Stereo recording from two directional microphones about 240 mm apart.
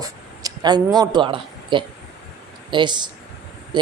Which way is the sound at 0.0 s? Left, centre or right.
Centre.